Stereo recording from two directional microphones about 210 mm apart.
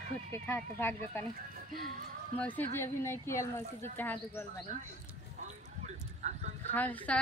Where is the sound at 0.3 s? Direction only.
10° left (ahead or behind).